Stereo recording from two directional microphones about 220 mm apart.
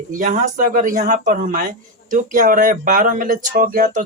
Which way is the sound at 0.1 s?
35° right (ahead or behind).